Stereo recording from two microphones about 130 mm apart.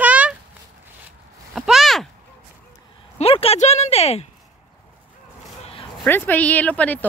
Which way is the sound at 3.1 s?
50° left (ahead or behind).